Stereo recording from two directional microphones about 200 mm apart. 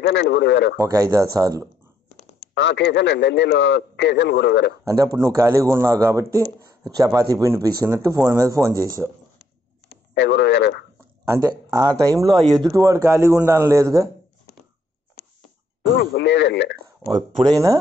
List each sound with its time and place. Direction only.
0.0 s a man's voice: 60° left (ahead or behind)
0.7 s a man's voice: 15° right (ahead or behind)
2.4 s a man's voice: 60° left (ahead or behind)
4.8 s a man's voice: 15° right (ahead or behind)
10.1 s a man's voice: 60° left (ahead or behind)
11.2 s a man's voice: 15° right (ahead or behind)
16.0 s a man's voice: 50° left (ahead or behind)
17.1 s speech: 20° right (ahead or behind)